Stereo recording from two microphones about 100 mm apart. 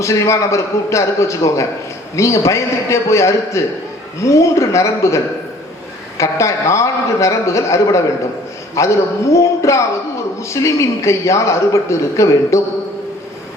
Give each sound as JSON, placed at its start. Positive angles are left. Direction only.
{"t": 0.0, "sound": "a man's voice", "side_deg": 30}